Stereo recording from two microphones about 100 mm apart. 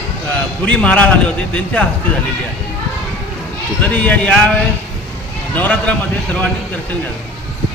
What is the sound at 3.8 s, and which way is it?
Speech, 15° left (ahead or behind).